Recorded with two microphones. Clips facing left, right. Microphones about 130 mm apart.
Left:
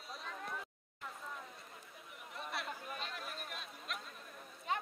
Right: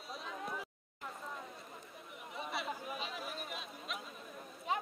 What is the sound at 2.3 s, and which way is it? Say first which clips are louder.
Chatter: right 3 dB; centre (ahead or behind).